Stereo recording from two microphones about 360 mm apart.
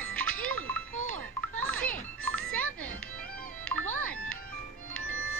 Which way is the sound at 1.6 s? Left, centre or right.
Centre.